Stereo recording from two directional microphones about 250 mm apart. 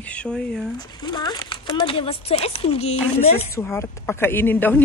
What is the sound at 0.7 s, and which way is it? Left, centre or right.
Speech, centre.